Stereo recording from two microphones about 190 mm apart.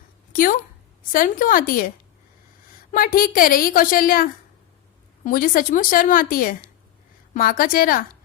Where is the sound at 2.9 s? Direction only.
50° left (ahead or behind).